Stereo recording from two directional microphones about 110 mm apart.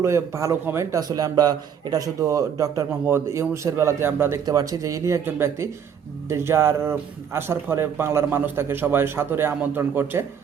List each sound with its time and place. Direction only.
0.0 s a man's voice: 25° right (ahead or behind)
4.4 s a man's voice: 35° right (ahead or behind)